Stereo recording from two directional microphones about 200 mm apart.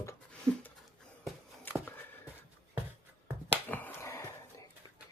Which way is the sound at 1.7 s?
10° left (ahead or behind).